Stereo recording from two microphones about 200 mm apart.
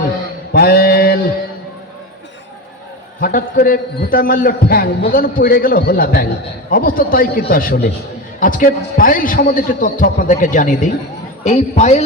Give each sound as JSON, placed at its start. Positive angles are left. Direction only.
{"t": 0.5, "sound": "mantra", "side_deg": 50}
{"t": 3.2, "sound": "a man's voice", "side_deg": 45}